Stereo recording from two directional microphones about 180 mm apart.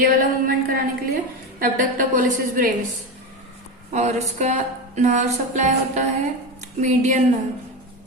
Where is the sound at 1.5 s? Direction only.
50° right (ahead or behind).